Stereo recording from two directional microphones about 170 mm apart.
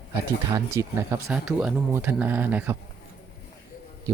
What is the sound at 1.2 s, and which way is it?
Speech, 5° right (ahead or behind).